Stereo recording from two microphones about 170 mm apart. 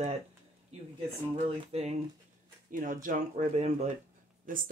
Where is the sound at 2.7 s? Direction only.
50° right (ahead or behind).